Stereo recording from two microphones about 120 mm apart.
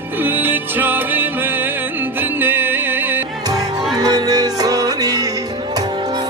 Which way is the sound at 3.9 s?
35° right (ahead or behind).